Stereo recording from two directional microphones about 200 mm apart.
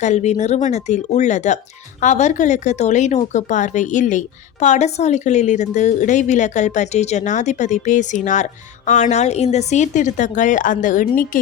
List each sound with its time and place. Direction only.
0.0 s speech: 35° left (ahead or behind)